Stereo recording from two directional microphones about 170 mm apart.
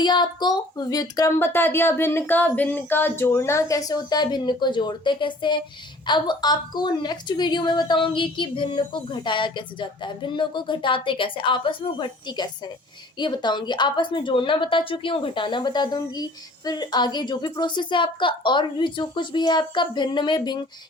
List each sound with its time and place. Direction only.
0.0 s a woman's voice: 25° left (ahead or behind)